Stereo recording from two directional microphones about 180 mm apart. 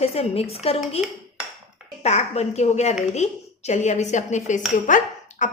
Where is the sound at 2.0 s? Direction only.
35° left (ahead or behind).